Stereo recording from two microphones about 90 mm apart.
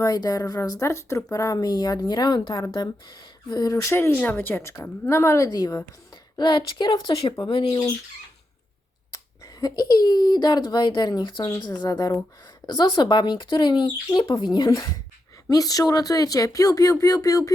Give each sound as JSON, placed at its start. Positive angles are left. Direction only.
{"t": 0.0, "sound": "speech", "side_deg": 45}
{"t": 3.9, "sound": "a woman's voice", "side_deg": 25}
{"t": 5.5, "sound": "speech", "side_deg": 45}
{"t": 6.3, "sound": "speech", "side_deg": 60}
{"t": 7.4, "sound": "speech", "side_deg": 80}
{"t": 9.1, "sound": "speech", "side_deg": 45}